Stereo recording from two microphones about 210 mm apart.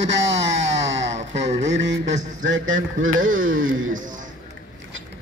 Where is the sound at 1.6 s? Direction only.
60° right (ahead or behind).